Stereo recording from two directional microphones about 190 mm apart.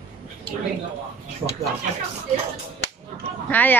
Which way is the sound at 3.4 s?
10° left (ahead or behind).